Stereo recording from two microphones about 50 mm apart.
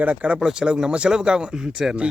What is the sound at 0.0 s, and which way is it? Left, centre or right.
Speech, right.